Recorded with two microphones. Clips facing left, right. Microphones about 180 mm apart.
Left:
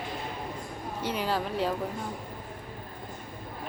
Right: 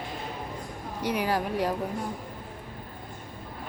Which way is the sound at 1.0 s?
15° right (ahead or behind).